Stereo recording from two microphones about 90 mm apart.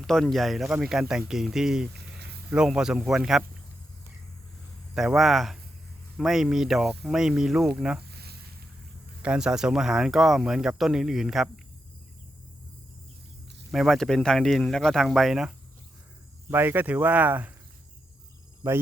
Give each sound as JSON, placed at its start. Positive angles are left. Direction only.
{"t": 0.0, "sound": "a man's voice", "side_deg": 5}
{"t": 4.9, "sound": "speech", "side_deg": -5}
{"t": 9.2, "sound": "speech", "side_deg": -10}
{"t": 13.7, "sound": "speech", "side_deg": 0}
{"t": 16.5, "sound": "speech", "side_deg": -25}